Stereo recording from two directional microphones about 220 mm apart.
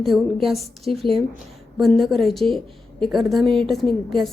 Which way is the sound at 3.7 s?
Centre (ahead or behind).